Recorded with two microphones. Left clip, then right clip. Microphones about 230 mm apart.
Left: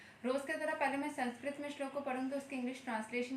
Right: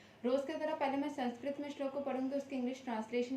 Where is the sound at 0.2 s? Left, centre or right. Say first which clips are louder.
Right 2 dB; centre.